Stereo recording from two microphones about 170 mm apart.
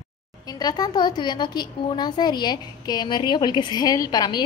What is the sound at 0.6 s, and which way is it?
A woman's voice, 25° left (ahead or behind).